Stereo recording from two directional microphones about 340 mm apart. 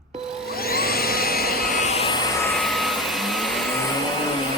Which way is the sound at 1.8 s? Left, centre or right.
Centre.